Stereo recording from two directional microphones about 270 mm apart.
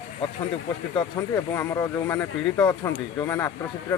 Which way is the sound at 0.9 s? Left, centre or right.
Centre.